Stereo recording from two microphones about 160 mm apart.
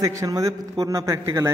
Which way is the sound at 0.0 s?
20° right (ahead or behind).